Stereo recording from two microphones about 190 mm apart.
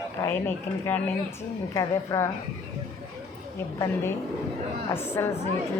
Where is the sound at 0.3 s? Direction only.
10° left (ahead or behind).